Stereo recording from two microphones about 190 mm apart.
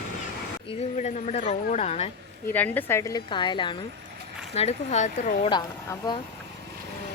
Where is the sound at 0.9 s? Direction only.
40° left (ahead or behind).